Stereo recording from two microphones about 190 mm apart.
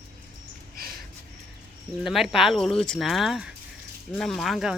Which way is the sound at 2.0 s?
Centre (ahead or behind).